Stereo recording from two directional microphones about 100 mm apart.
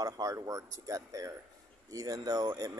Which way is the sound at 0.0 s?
35° right (ahead or behind).